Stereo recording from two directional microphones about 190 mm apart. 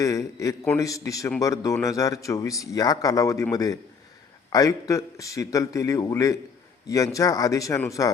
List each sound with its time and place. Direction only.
0.0 s speech: 15° left (ahead or behind)